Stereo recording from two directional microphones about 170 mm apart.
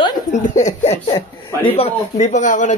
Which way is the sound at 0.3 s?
45° left (ahead or behind).